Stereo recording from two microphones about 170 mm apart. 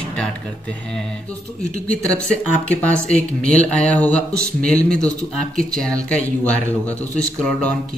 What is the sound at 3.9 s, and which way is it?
Speech, 10° left (ahead or behind).